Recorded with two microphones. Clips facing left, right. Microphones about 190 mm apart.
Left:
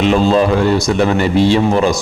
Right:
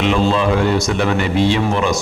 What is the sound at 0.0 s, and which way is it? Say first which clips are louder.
A man's voice: left 4 dB; 40° left (ahead or behind).